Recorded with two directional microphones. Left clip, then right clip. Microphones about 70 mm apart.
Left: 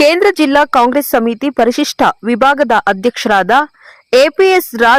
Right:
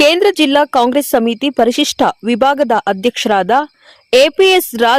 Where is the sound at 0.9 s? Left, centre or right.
Centre.